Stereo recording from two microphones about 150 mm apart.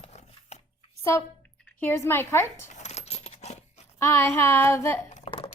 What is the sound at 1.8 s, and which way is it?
Child singing, 15° left (ahead or behind).